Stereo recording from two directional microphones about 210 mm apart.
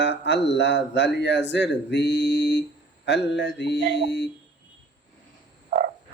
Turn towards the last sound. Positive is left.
turn(degrees=-40)  # may be behind; listen again after turning